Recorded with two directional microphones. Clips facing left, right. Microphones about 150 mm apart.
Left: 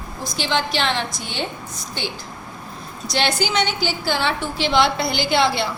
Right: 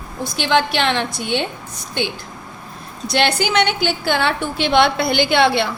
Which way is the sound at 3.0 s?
60° right (ahead or behind).